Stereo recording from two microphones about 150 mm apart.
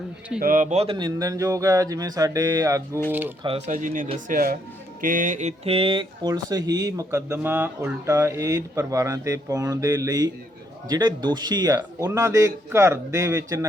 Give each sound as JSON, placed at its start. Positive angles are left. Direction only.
{"t": 0.4, "sound": "speech", "side_deg": -60}
{"t": 0.9, "sound": "speech", "side_deg": -30}
{"t": 3.7, "sound": "speech", "side_deg": -60}
{"t": 4.3, "sound": "speech", "side_deg": -75}
{"t": 4.9, "sound": "speech", "side_deg": -65}
{"t": 7.3, "sound": "speech", "side_deg": -10}